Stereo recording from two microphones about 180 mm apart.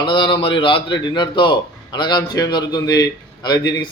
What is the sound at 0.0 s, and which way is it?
Speech, 25° left (ahead or behind).